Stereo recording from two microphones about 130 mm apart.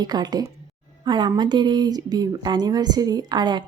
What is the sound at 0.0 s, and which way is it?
Speech, 30° right (ahead or behind).